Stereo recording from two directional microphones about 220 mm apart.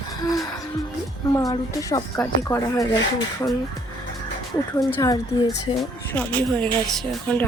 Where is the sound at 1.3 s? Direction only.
15° left (ahead or behind).